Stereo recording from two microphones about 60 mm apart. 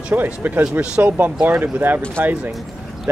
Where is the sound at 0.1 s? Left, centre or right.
Right.